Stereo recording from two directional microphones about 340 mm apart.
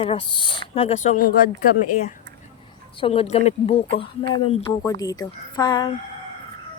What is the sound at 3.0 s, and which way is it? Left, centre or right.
Speech, centre.